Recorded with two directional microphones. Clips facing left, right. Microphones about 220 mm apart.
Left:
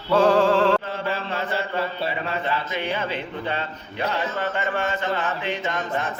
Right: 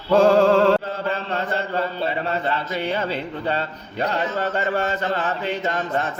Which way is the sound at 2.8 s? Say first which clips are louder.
Right 3 dB; 40° right (ahead or behind).